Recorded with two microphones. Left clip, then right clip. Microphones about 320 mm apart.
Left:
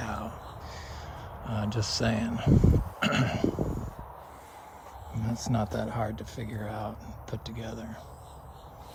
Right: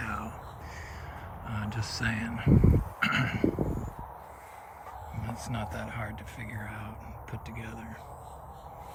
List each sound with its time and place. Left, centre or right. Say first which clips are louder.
0.0 s a sound: even; centre
1.5 s speech: left 5 dB; centre
2.5 s speech: even; right
3.0 s speech: even; centre
5.2 s speech: left 6 dB; centre